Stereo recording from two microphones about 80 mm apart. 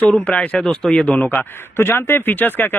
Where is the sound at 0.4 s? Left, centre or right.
Centre.